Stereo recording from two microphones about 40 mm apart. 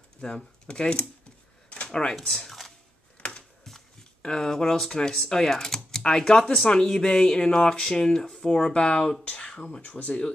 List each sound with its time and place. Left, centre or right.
0.2 s speech: left
2.2 s speech: centre
4.4 s speech: centre; by 10.3 s left